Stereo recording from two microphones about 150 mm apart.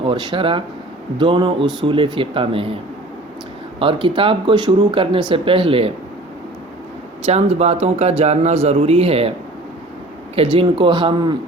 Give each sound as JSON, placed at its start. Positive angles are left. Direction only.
{"t": 0.0, "sound": "speech", "side_deg": -35}
{"t": 3.8, "sound": "speech", "side_deg": -35}
{"t": 7.3, "sound": "a man's voice", "side_deg": -45}
{"t": 10.3, "sound": "speech", "side_deg": -35}